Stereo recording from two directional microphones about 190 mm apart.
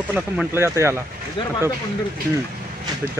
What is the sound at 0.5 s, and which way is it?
Speech, 15° right (ahead or behind).